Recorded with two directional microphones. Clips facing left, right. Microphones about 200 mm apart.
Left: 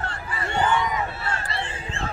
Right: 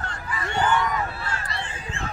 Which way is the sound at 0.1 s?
30° left (ahead or behind).